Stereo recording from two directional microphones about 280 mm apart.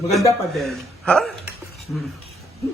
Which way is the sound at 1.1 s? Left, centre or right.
Centre.